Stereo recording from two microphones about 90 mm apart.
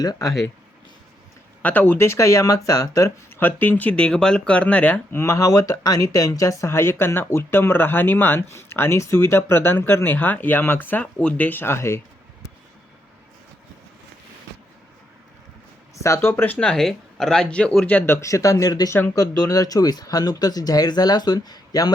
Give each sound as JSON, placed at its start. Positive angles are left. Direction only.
{"t": 0.0, "sound": "speech", "side_deg": 45}
{"t": 1.6, "sound": "speech", "side_deg": 20}
{"t": 5.1, "sound": "speech", "side_deg": 30}
{"t": 16.0, "sound": "speech", "side_deg": 35}
{"t": 16.6, "sound": "speech", "side_deg": 10}